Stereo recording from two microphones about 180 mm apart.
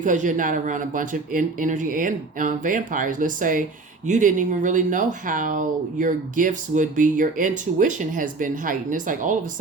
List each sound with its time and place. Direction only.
0.0 s speech: 45° right (ahead or behind)